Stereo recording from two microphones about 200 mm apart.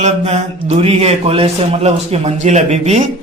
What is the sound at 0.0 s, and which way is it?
Speech, 35° right (ahead or behind).